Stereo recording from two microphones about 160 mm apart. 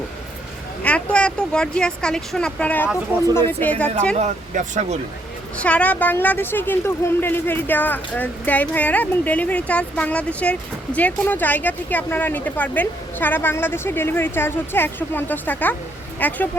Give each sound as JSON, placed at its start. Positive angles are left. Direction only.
{"t": 0.8, "sound": "speech", "side_deg": 10}
{"t": 4.1, "sound": "speech", "side_deg": -50}
{"t": 5.5, "sound": "speech", "side_deg": 10}